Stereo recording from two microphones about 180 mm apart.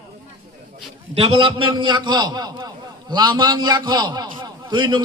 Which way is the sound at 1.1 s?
30° right (ahead or behind).